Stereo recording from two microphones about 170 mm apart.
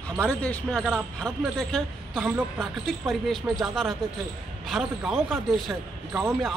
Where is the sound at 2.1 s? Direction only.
10° right (ahead or behind).